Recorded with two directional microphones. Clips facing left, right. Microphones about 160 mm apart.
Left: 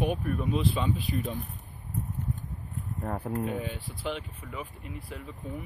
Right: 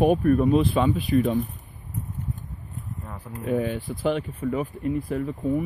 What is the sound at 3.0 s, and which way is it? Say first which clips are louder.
Speech: left 7 dB; 50° left (ahead or behind).